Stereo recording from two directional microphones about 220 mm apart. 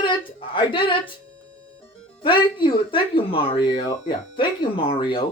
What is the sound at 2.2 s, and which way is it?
Speech, 20° left (ahead or behind).